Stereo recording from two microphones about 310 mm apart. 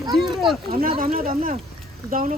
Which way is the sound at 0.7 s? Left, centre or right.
Right.